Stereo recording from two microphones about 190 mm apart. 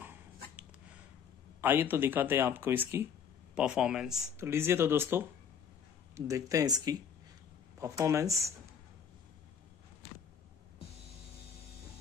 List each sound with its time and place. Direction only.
1.6 s speech: 10° right (ahead or behind)